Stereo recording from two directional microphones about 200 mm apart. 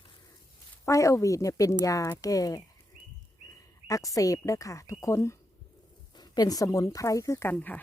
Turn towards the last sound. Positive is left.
turn(degrees=10)  # may be behind; listen again after turning